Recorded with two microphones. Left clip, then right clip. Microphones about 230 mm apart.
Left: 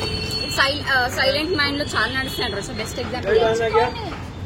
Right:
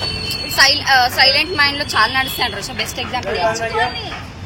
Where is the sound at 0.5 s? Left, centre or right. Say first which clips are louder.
Right 7 dB; left.